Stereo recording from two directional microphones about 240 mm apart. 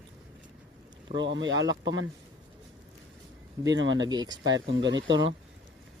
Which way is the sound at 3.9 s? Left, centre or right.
Centre.